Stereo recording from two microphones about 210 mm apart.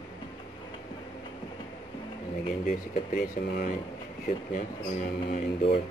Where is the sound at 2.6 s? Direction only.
45° left (ahead or behind).